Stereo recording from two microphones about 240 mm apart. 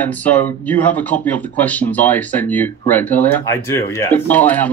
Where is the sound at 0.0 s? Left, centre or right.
Centre.